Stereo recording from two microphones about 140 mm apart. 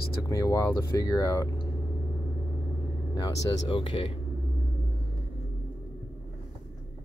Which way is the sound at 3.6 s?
35° left (ahead or behind).